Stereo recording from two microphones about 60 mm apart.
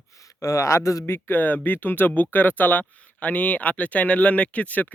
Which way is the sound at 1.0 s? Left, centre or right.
Left.